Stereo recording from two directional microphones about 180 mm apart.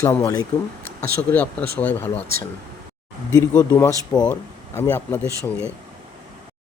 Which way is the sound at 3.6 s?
20° left (ahead or behind).